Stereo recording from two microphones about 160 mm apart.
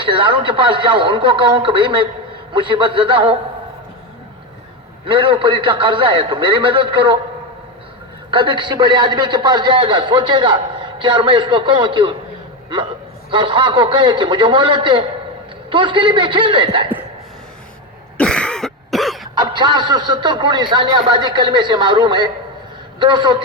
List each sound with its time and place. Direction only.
0.0 s a man's voice: 30° right (ahead or behind)
5.0 s a man's voice: 35° right (ahead or behind)
8.3 s a man's voice: 30° right (ahead or behind)
13.3 s a man's voice: 30° right (ahead or behind)
18.2 s throat clearing: 5° left (ahead or behind)
19.4 s a man's voice: 30° right (ahead or behind)